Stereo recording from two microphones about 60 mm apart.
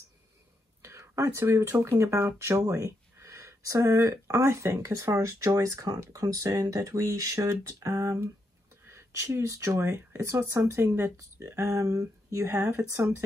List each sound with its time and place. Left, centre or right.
0.8 s speech: right
2.6 s speech: right
5.0 s a woman's voice: right
12.4 s speech: right